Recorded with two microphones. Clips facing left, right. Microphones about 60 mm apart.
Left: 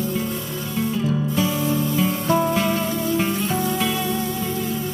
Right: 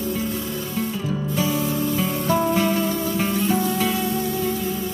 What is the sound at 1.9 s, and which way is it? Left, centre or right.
Music, left.